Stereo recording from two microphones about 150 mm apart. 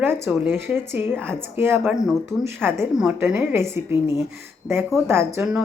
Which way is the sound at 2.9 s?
5° right (ahead or behind).